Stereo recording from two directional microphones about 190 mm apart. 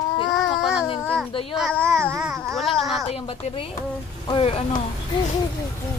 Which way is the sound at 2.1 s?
5° right (ahead or behind).